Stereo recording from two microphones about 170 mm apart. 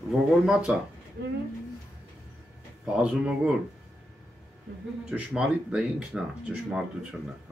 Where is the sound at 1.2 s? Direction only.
70° right (ahead or behind).